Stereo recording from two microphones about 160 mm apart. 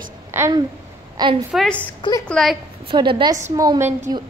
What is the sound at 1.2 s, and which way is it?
Speech, 25° right (ahead or behind).